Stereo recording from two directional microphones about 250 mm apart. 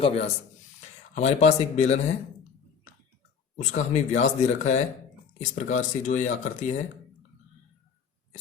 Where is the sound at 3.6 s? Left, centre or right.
Left.